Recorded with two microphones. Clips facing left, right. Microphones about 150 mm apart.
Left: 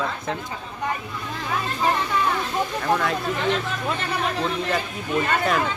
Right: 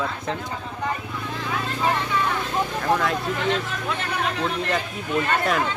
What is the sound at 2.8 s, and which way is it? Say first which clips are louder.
Speech: even; centre (ahead or behind).